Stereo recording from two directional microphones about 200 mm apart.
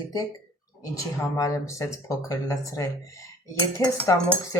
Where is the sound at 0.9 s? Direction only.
15° left (ahead or behind).